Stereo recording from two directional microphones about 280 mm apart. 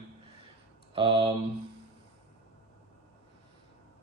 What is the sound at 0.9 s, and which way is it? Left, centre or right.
Speech, centre.